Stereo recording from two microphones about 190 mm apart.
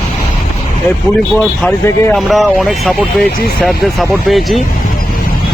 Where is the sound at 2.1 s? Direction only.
Centre (ahead or behind).